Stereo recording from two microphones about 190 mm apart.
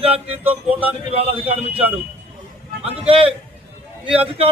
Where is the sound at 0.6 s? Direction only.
10° right (ahead or behind).